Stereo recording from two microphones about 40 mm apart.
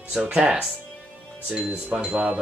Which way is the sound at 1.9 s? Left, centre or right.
Right.